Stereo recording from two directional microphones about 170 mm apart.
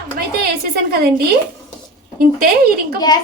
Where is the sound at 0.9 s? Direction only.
65° right (ahead or behind).